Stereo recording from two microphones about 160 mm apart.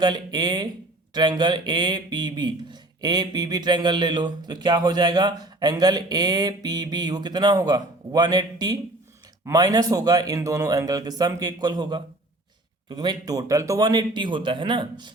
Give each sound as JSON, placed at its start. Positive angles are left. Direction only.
{"t": 0.0, "sound": "speech", "side_deg": -25}